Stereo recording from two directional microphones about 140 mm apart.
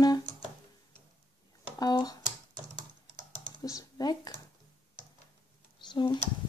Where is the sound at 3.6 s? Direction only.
25° left (ahead or behind).